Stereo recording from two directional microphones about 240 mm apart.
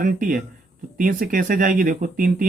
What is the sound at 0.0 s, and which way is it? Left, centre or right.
Speech, right.